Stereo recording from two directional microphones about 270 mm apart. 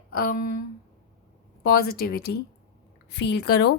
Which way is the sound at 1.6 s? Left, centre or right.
Left.